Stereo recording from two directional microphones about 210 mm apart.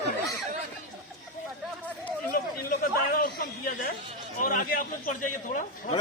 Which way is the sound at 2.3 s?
45° left (ahead or behind).